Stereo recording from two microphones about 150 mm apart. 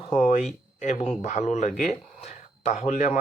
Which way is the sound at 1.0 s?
45° left (ahead or behind).